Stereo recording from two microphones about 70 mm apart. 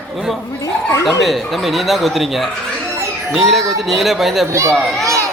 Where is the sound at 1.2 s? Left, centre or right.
Centre.